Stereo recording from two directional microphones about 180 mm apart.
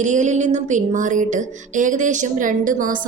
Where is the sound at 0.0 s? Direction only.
40° right (ahead or behind).